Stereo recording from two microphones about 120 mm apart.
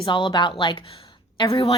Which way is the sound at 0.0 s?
40° left (ahead or behind).